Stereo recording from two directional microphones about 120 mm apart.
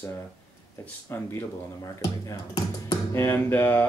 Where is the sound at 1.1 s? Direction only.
20° left (ahead or behind).